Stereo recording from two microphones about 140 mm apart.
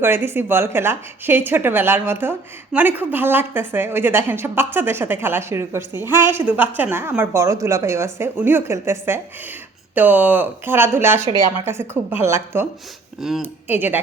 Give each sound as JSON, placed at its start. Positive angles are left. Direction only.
{"t": 0.0, "sound": "a woman's voice", "side_deg": -15}
{"t": 13.1, "sound": "speech", "side_deg": 0}
{"t": 13.4, "sound": "a woman's voice", "side_deg": -15}